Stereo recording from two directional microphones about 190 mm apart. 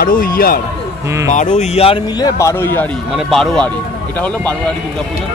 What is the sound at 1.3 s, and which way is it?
Speech, 40° left (ahead or behind).